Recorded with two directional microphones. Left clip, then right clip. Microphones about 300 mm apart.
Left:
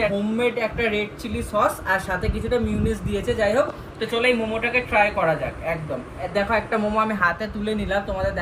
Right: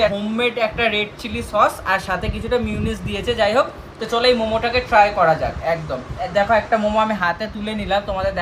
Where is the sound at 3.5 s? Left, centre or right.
Centre.